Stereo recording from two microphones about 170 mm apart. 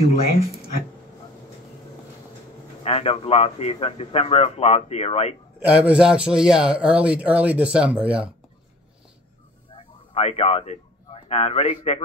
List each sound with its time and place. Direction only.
2.8 s a man's voice: 35° left (ahead or behind)
5.7 s a man's voice: 5° right (ahead or behind)
10.1 s a man's voice: 35° left (ahead or behind)